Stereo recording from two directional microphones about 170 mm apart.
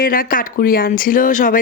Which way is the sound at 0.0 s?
55° left (ahead or behind).